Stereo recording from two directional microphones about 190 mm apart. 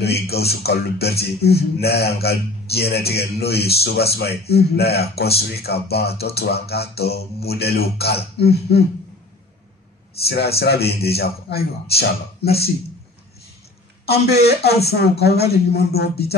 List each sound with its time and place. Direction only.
0.0 s a man's voice: 55° left (ahead or behind)
10.2 s a man's voice: 55° left (ahead or behind)
14.0 s a man's voice: 55° left (ahead or behind)